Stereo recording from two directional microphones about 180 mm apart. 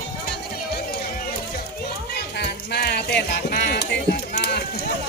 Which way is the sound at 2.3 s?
65° left (ahead or behind).